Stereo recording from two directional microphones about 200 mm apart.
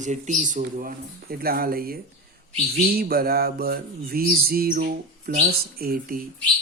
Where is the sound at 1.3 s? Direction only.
50° right (ahead or behind).